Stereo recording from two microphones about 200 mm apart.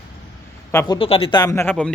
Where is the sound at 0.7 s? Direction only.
25° left (ahead or behind); by 1.9 s 10° left (ahead or behind).